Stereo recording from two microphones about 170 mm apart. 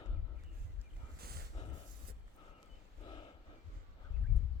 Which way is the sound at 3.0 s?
25° left (ahead or behind).